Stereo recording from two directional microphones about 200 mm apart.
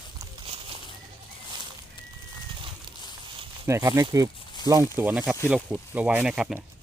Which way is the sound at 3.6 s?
15° right (ahead or behind).